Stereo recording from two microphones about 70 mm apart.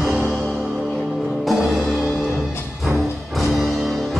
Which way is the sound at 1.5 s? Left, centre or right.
Centre.